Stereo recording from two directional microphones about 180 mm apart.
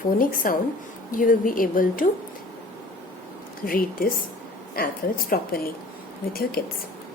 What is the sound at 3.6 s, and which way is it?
A woman's voice, 55° left (ahead or behind).